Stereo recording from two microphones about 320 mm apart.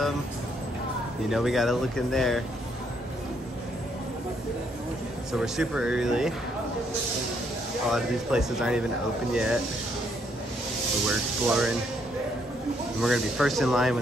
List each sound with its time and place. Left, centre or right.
1.3 s speech: centre
5.4 s speech: centre
7.9 s speech: centre
11.1 s speech: centre
13.0 s speech: centre